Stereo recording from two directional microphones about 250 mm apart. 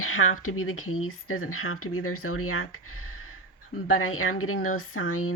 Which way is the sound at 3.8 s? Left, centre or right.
Left.